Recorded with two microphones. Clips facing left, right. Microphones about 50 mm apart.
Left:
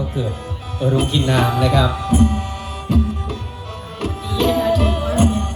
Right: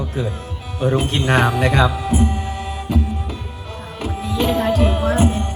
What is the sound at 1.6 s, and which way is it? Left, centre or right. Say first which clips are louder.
Speech: even; right.